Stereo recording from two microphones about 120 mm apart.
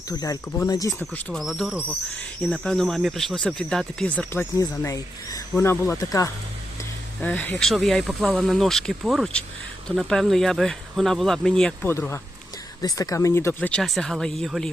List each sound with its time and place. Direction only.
0.1 s speech: 30° left (ahead or behind)
1.3 s speech: centre (ahead or behind)
4.5 s speech: 25° left (ahead or behind)
7.2 s speech: 15° left (ahead or behind)
7.7 s speech: centre (ahead or behind)
11.9 s speech: 20° left (ahead or behind); by 14.7 s centre (ahead or behind)